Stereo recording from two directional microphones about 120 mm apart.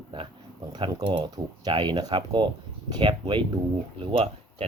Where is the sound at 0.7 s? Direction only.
45° right (ahead or behind).